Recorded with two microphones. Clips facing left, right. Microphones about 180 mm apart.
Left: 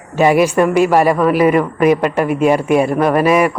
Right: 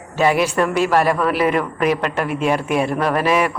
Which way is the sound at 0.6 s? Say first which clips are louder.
Left 5 dB; 5° left (ahead or behind).